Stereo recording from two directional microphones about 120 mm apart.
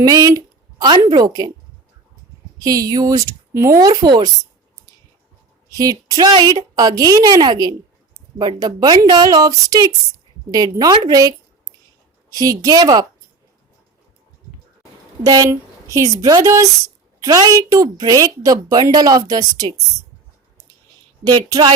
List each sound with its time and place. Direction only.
0.0 s speech: 30° right (ahead or behind)
2.6 s speech: 30° right (ahead or behind)
5.7 s speech: 30° right (ahead or behind)
15.2 s speech: 30° right (ahead or behind)
21.2 s speech: 35° right (ahead or behind)